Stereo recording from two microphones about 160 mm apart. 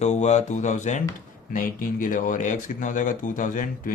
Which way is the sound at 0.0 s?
45° left (ahead or behind).